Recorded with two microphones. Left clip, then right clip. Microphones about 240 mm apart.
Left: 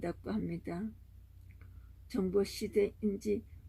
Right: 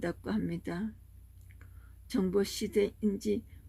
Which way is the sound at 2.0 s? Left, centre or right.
Right.